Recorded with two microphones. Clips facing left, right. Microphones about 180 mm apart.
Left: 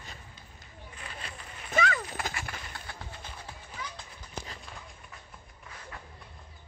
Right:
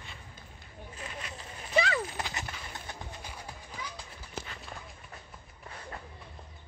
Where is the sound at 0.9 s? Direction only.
30° right (ahead or behind).